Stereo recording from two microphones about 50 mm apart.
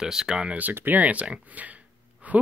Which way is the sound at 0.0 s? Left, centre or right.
Centre.